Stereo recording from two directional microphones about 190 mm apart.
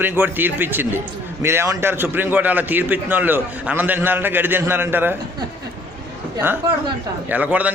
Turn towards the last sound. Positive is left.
turn(degrees=-10)  # may be behind; listen again after turning